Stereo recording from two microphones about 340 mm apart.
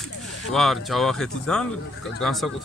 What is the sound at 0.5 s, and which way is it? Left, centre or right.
Speech, centre.